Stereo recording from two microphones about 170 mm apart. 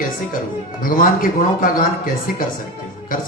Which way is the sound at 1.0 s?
55° left (ahead or behind).